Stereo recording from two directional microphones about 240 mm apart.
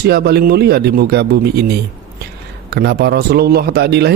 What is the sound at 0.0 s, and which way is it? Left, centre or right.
A man's voice, right.